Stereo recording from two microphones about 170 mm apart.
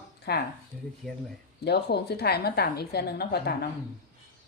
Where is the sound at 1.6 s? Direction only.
70° left (ahead or behind).